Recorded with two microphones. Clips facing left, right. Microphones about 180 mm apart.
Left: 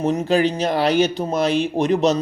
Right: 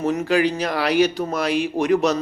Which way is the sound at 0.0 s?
20° left (ahead or behind).